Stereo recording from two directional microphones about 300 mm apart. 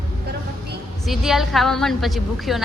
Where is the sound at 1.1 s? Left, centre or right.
Centre.